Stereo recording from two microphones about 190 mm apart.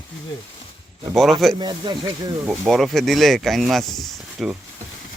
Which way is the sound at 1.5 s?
25° right (ahead or behind).